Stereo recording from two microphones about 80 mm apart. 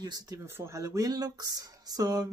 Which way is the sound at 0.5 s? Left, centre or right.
Right.